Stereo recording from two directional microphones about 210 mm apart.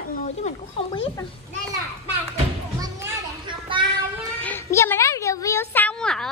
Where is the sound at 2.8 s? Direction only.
15° right (ahead or behind).